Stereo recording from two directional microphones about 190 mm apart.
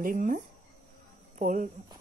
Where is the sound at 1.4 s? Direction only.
45° right (ahead or behind).